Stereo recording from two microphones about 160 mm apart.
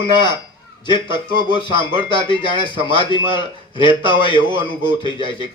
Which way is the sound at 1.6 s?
30° left (ahead or behind).